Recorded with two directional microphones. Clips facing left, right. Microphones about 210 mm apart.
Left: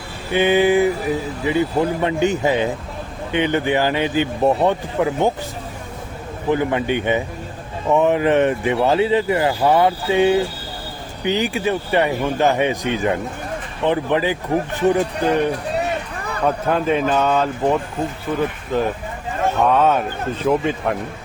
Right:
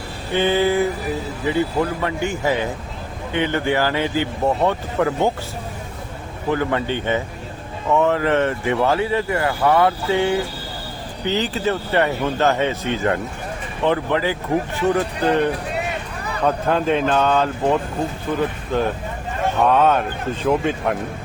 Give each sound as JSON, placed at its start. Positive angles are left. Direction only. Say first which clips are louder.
{"t": 0.3, "sound": "speech", "louder": "left 3 dB", "side_deg": 15}
{"t": 6.5, "sound": "speech", "louder": "left 2 dB", "side_deg": 20}
{"t": 16.4, "sound": "speech", "louder": "even", "side_deg": 5}